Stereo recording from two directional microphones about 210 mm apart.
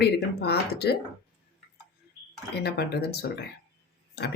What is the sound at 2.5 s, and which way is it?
Speech, 50° left (ahead or behind).